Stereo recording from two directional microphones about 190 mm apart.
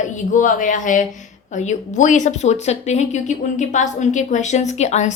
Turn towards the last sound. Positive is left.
turn(degrees=40)  # may be behind; listen again after turning